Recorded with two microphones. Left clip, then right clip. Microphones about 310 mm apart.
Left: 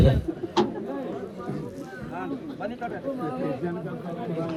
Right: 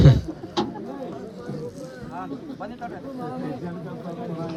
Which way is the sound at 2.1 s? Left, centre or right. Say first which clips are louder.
Left 1 dB; centre.